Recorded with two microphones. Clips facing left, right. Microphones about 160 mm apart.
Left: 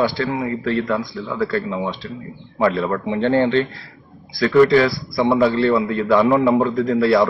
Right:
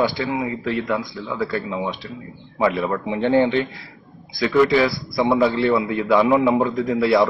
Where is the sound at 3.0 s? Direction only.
20° right (ahead or behind).